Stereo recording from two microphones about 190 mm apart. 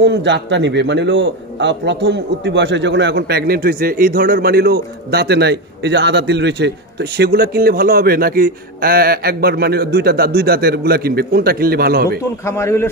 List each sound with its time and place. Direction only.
0.0 s a man's voice: 65° right (ahead or behind)
12.4 s a man's voice: 15° left (ahead or behind)